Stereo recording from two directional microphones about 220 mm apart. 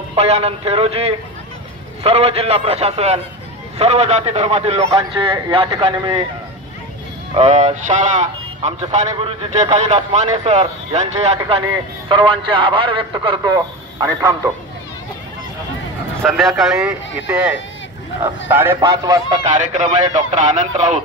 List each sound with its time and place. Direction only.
0.1 s a man's voice: 30° right (ahead or behind)
4.8 s a man's voice: 20° right (ahead or behind)
7.3 s a man's voice: 30° right (ahead or behind)
16.3 s speech: centre (ahead or behind); by 19.4 s 15° right (ahead or behind)
19.4 s a man's voice: 35° right (ahead or behind)